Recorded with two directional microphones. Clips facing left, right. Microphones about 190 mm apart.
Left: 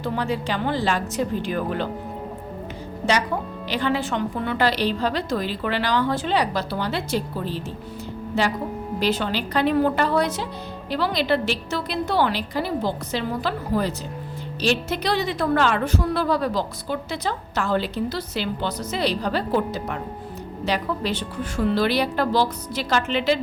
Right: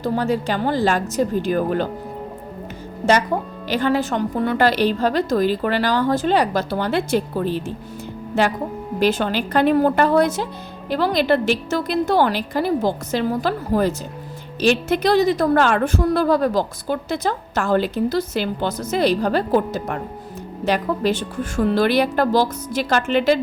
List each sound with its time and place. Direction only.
0.0 s a woman's voice: 45° right (ahead or behind)
3.7 s a woman's voice: 45° right (ahead or behind)